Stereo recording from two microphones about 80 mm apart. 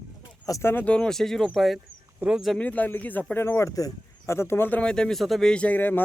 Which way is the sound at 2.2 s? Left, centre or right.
Right.